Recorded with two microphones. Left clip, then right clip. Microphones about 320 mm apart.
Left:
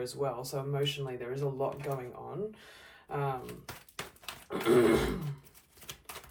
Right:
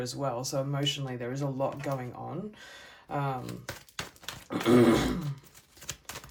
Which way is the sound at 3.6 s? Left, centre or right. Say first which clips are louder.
Right 4 dB; right.